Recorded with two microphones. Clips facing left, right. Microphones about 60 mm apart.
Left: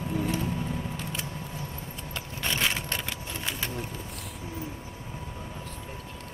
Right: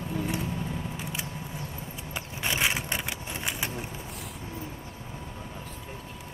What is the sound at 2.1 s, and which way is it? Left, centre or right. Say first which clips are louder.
Keys jangling: right 1 dB; centre.